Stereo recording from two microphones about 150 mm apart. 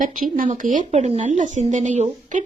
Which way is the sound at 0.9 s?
45° right (ahead or behind).